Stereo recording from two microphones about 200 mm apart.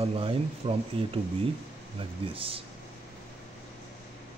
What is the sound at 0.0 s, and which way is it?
Speech, 30° right (ahead or behind).